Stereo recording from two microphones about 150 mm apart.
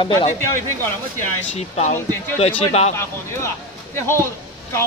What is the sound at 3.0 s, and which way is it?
Speech, 20° left (ahead or behind).